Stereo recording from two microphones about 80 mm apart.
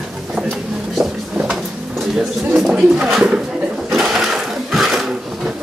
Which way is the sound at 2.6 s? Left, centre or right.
Centre.